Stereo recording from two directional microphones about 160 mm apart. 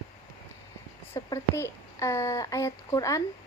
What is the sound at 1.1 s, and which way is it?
Speech, 15° left (ahead or behind).